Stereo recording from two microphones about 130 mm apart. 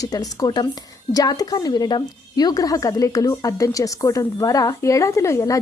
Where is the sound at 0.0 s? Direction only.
30° left (ahead or behind).